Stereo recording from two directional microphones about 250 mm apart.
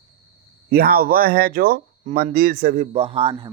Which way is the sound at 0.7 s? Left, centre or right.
Right.